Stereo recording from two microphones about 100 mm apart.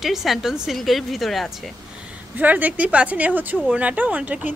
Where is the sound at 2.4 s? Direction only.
15° right (ahead or behind).